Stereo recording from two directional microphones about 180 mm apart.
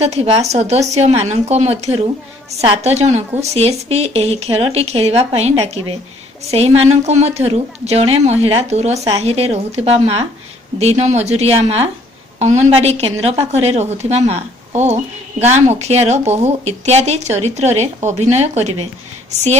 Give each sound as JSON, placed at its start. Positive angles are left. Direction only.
{"t": 0.0, "sound": "speech", "side_deg": -35}